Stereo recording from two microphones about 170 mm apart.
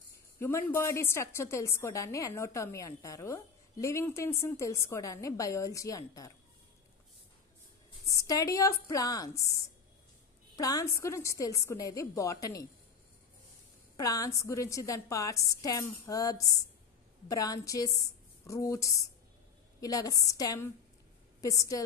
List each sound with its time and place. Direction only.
0.4 s a woman's voice: 15° left (ahead or behind)
8.1 s a woman's voice: 20° left (ahead or behind)
13.9 s a woman's voice: 20° left (ahead or behind)